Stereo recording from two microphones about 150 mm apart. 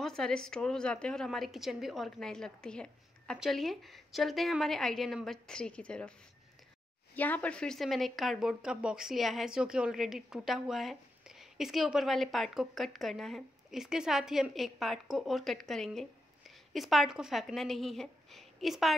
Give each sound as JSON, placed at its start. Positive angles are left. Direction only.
{"t": 0.0, "sound": "speech", "side_deg": 5}
{"t": 7.2, "sound": "speech", "side_deg": 10}